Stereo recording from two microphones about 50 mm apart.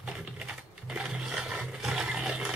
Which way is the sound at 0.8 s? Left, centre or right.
Centre.